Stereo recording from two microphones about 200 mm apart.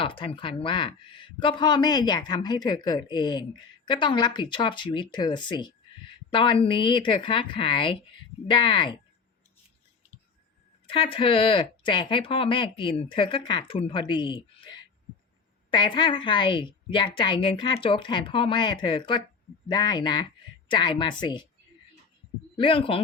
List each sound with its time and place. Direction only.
0.0 s speech: 25° left (ahead or behind)
10.8 s speech: 25° left (ahead or behind)
22.5 s speech: 25° left (ahead or behind)